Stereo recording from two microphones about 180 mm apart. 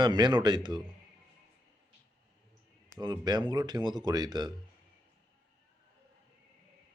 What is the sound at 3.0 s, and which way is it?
Speech, 20° right (ahead or behind).